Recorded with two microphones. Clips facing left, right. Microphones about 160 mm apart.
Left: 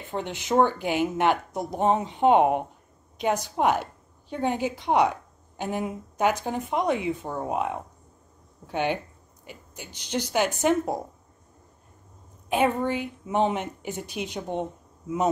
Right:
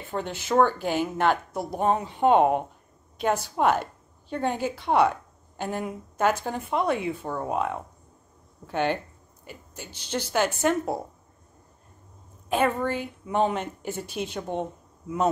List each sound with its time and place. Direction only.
0.1 s a woman's voice: 20° left (ahead or behind)
12.4 s a woman's voice: 15° left (ahead or behind)